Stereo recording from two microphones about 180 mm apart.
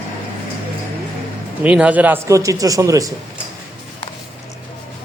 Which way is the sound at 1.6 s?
10° right (ahead or behind).